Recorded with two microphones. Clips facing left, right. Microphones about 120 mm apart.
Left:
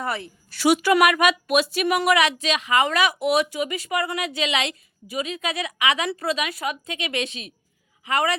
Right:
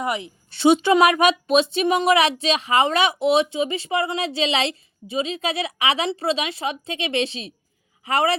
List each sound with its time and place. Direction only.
0.0 s a woman's voice: 15° right (ahead or behind); by 8.4 s 30° right (ahead or behind)